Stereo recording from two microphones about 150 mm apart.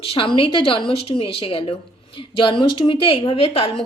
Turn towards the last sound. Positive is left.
turn(degrees=40)  # may be behind; listen again after turning